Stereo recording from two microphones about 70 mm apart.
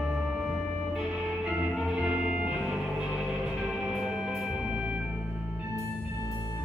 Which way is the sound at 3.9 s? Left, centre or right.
Centre.